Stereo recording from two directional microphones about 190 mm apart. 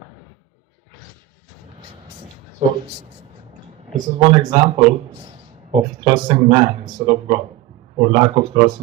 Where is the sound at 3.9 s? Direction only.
25° right (ahead or behind).